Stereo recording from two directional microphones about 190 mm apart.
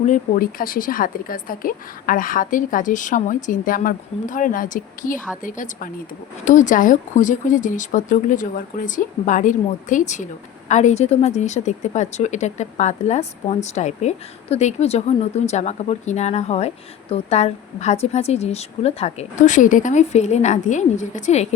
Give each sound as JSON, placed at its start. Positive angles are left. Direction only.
{"t": 0.0, "sound": "a woman's voice", "side_deg": 45}